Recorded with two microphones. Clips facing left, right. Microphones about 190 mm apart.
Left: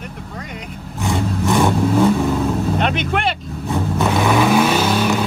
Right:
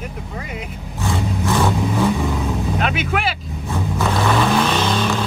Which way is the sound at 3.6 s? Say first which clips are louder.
Left 3 dB; 15° left (ahead or behind).